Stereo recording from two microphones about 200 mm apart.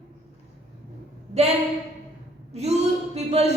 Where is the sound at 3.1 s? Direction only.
30° right (ahead or behind).